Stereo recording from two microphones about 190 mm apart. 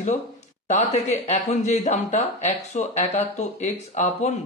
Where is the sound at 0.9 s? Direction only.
35° left (ahead or behind).